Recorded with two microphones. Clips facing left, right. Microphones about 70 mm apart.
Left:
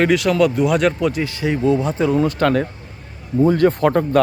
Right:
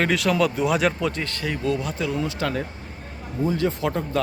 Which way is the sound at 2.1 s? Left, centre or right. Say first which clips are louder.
Left 10 dB; left.